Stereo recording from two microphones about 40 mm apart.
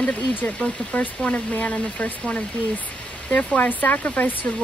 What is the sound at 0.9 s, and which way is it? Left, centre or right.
Speech, left.